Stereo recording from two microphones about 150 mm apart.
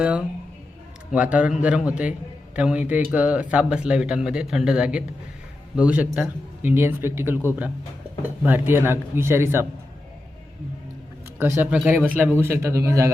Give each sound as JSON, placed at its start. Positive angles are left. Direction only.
{"t": 0.0, "sound": "speech", "side_deg": -10}
{"t": 11.3, "sound": "speech", "side_deg": -15}